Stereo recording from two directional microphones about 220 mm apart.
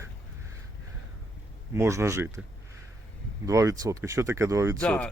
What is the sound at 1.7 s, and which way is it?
Speech, 10° right (ahead or behind).